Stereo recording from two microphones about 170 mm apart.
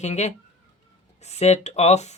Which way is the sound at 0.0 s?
40° left (ahead or behind).